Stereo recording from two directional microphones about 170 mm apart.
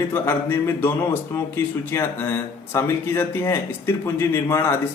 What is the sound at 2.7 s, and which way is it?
Speech, 15° left (ahead or behind).